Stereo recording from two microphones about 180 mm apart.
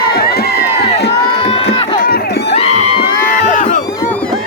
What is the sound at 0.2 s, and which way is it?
Crowd, 60° left (ahead or behind).